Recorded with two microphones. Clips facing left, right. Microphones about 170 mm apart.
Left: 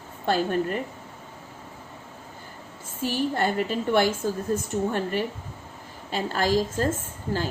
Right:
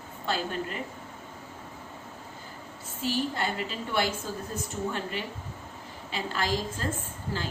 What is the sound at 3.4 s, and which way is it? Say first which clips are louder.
Speech: left 7 dB; 50° left (ahead or behind).